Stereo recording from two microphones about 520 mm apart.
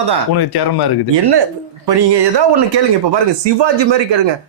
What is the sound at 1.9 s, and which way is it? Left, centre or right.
Speech, right.